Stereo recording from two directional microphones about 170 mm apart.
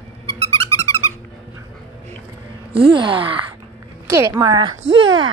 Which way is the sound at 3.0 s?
30° right (ahead or behind).